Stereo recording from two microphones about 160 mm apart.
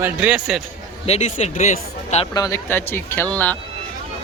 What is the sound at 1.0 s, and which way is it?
Speech, 45° left (ahead or behind).